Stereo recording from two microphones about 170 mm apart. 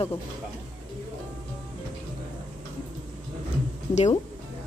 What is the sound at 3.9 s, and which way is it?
Speech, 40° left (ahead or behind).